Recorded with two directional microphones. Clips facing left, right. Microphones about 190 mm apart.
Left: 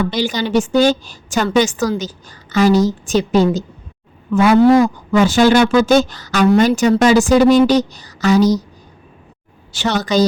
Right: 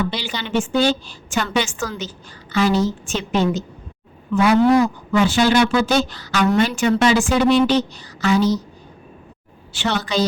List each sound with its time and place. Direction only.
0.1 s a woman's voice: 45° left (ahead or behind)
4.3 s a woman's voice: 50° left (ahead or behind)
9.7 s a woman's voice: 40° left (ahead or behind)